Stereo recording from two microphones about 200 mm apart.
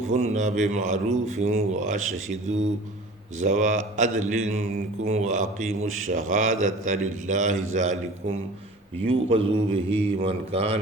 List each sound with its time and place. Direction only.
0.1 s a man's voice: 35° right (ahead or behind)
3.4 s a man's voice: 40° right (ahead or behind)
9.0 s mantra: 30° right (ahead or behind)
10.2 s a man's voice: 30° right (ahead or behind)